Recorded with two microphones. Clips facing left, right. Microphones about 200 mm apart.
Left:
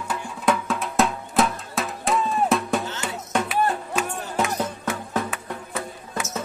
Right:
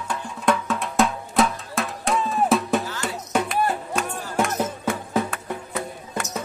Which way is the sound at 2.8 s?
25° left (ahead or behind).